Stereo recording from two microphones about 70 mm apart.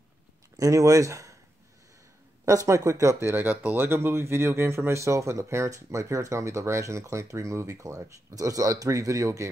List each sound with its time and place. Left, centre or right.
0.6 s speech: right
2.4 s speech: right
3.3 s speech: right
3.8 s speech: right